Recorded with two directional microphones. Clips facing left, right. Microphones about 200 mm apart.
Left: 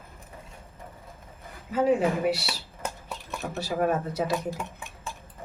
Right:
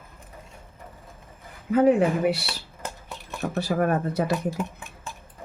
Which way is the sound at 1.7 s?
60° right (ahead or behind).